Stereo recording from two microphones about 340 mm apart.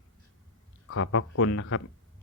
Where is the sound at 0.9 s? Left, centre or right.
Left.